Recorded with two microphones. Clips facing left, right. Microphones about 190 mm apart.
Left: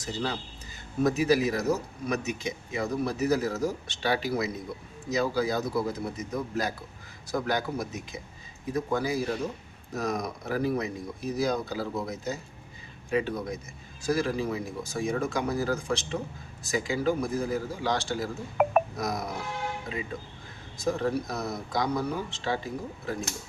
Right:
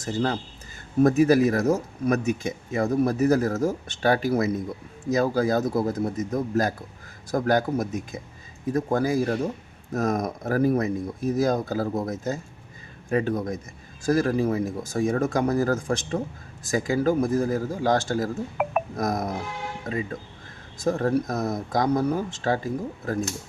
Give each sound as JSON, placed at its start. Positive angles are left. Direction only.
{"t": 0.0, "sound": "speech", "side_deg": -50}
{"t": 18.6, "sound": "music", "side_deg": 0}
{"t": 18.9, "sound": "speech", "side_deg": -50}
{"t": 20.8, "sound": "speech", "side_deg": -50}